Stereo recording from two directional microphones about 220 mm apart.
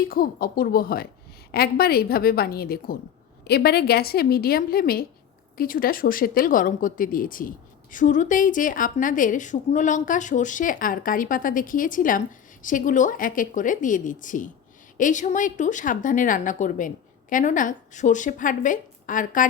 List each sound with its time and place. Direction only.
0.1 s a woman's voice: 40° left (ahead or behind)